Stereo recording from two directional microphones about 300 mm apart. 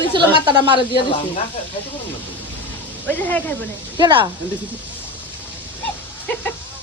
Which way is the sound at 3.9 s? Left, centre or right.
Centre.